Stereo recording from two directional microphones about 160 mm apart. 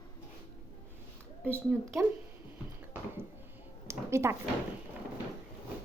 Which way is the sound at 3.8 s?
15° right (ahead or behind).